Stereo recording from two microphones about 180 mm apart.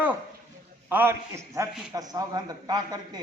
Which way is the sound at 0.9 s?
10° right (ahead or behind).